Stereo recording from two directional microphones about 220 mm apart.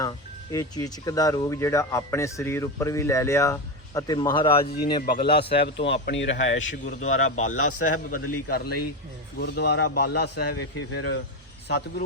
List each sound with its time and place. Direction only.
0.5 s speech: 15° left (ahead or behind)
5.0 s a man's voice: 45° left (ahead or behind); by 7.3 s 65° left (ahead or behind)
7.5 s a man's voice: 80° left
8.1 s a man's voice: 45° left (ahead or behind)